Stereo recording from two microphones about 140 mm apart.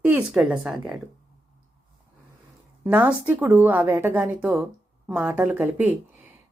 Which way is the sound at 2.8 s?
10° right (ahead or behind).